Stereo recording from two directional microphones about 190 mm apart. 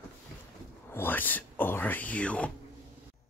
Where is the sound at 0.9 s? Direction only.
10° left (ahead or behind).